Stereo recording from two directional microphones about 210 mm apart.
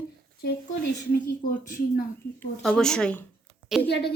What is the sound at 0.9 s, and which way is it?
Speech, 40° left (ahead or behind).